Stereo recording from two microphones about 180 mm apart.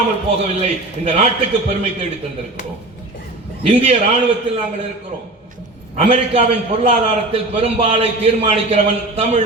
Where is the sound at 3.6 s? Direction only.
35° right (ahead or behind).